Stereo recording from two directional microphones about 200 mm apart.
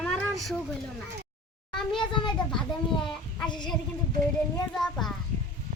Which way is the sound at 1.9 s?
25° left (ahead or behind).